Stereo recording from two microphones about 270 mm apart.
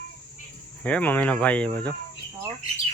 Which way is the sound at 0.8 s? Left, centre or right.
Centre.